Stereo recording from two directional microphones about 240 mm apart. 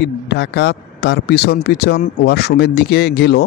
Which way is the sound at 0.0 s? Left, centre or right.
Left.